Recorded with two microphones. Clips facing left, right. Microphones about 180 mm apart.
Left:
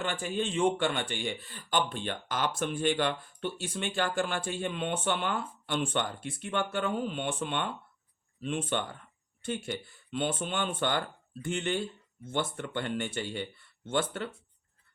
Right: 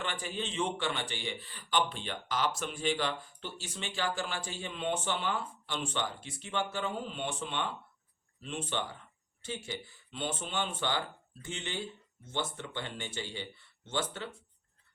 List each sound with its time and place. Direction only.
0.0 s a man's voice: 45° left (ahead or behind)